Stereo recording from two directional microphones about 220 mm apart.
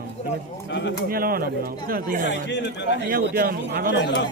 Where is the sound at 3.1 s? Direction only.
45° right (ahead or behind).